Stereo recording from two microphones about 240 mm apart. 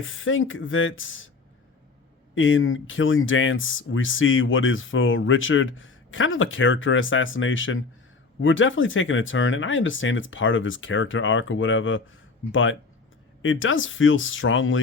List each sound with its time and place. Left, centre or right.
0.0 s speech: left
2.3 s speech: left